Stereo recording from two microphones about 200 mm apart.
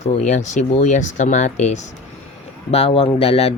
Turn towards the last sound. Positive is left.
turn(degrees=30)  # may be behind; listen again after turning